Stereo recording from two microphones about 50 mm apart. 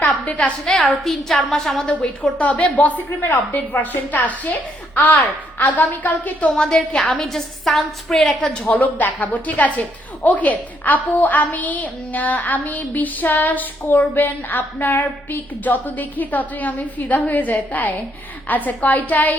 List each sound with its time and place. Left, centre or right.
0.0 s a sound: left
0.6 s a woman's voice: centre
1.9 s a woman's voice: left
3.2 s a woman's voice: left
6.5 s a woman's voice: centre
7.3 s a woman's voice: centre
8.6 s a woman's voice: left